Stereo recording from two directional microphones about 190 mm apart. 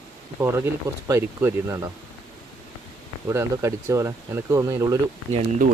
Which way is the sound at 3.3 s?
15° right (ahead or behind).